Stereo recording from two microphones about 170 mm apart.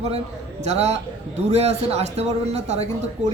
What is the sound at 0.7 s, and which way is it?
Speech, 40° right (ahead or behind).